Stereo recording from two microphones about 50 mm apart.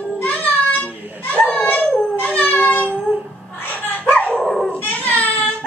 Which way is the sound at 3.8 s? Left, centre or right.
Left.